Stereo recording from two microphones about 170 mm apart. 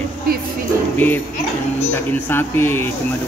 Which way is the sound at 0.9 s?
10° left (ahead or behind).